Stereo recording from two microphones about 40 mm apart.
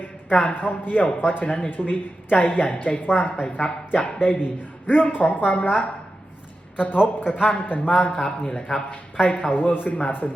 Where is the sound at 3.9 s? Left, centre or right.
Left.